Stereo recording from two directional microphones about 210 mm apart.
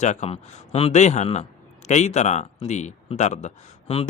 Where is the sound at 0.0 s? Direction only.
35° left (ahead or behind).